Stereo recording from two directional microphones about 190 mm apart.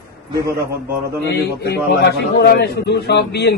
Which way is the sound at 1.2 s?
60° left (ahead or behind).